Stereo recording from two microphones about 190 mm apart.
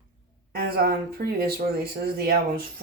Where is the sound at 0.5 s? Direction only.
50° right (ahead or behind).